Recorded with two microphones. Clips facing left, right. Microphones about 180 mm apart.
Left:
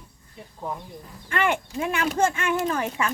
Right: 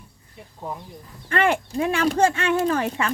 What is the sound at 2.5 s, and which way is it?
Speech, 35° right (ahead or behind).